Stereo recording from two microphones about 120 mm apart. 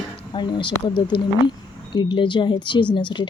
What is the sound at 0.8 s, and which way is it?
Speech, 45° left (ahead or behind).